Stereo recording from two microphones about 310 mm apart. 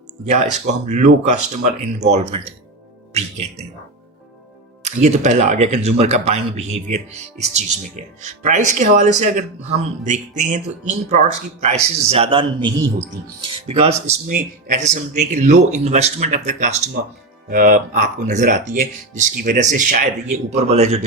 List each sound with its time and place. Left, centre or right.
0.3 s speech: right
4.8 s speech: right